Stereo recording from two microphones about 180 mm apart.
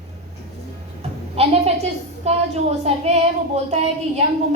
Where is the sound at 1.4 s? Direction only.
35° right (ahead or behind).